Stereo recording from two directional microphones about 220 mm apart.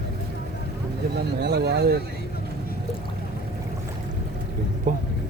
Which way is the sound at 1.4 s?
50° right (ahead or behind).